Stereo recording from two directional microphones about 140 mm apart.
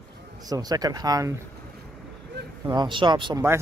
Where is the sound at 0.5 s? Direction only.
30° right (ahead or behind).